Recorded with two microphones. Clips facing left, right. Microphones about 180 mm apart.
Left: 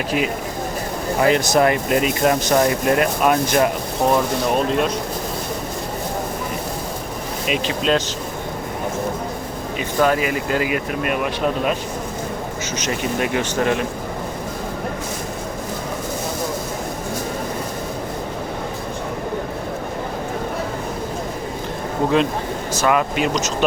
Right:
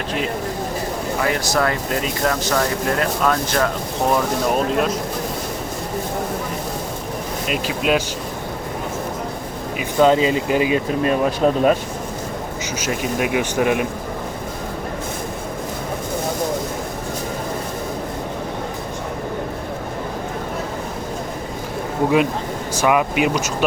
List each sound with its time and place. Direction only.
1.2 s speech: 20° left (ahead or behind)
4.1 s speech: centre (ahead or behind)
7.4 s speech: centre (ahead or behind)
10.0 s speech: 25° right (ahead or behind)
12.8 s speech: 5° right (ahead or behind)
22.7 s speech: 15° right (ahead or behind)